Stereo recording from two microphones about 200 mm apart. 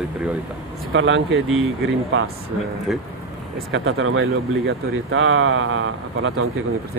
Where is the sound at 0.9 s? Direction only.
65° right (ahead or behind).